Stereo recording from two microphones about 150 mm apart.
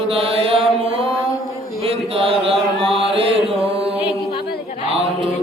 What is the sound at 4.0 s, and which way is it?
Music, 35° left (ahead or behind).